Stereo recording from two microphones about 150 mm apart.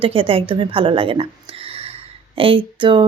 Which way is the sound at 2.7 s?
35° right (ahead or behind).